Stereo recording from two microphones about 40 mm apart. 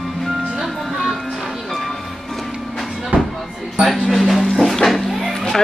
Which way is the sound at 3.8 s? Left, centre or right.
Centre.